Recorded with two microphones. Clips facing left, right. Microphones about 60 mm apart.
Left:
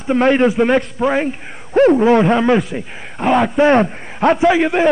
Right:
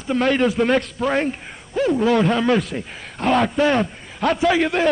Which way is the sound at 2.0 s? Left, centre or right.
Left.